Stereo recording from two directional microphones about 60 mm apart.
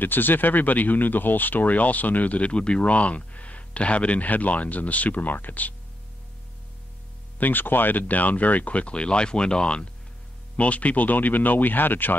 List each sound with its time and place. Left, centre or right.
0.0 s speech: left
7.3 s speech: left